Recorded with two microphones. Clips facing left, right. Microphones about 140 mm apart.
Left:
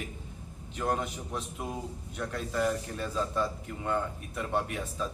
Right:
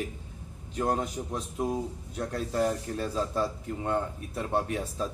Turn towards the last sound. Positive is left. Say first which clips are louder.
# right 3 dB
turn(degrees=-35)  # may be behind; listen again after turning